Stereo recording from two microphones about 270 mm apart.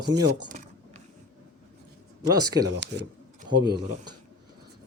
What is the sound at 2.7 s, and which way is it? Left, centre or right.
Speech, right.